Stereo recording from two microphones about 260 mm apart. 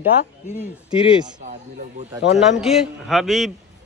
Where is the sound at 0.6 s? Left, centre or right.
Centre.